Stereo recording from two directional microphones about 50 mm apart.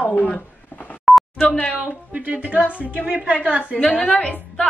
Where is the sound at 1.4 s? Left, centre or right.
Left.